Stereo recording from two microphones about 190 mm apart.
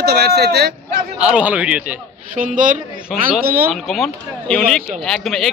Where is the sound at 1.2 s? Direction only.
5° right (ahead or behind).